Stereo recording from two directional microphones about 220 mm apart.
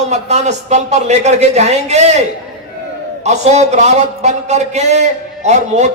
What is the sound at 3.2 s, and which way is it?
A man's voice, 30° right (ahead or behind).